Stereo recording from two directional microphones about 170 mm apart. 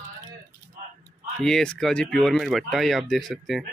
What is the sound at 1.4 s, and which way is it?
Speech, 5° left (ahead or behind).